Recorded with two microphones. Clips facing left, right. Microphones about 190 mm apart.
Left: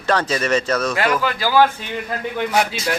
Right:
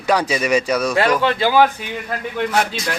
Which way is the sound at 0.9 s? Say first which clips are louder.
Right 3 dB; 30° right (ahead or behind).